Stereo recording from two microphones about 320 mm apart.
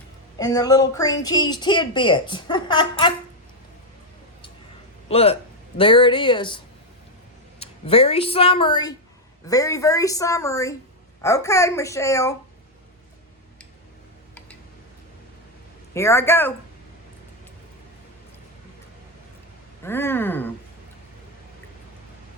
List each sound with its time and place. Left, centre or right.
0.3 s speech: centre
5.0 s speech: centre
7.6 s speech: centre
16.0 s speech: centre
19.8 s speech: centre